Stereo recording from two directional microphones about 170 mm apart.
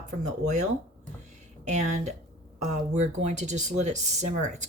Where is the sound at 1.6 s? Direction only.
45° right (ahead or behind).